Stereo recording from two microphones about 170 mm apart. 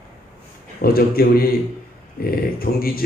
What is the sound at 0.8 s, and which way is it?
Speech, 60° left (ahead or behind).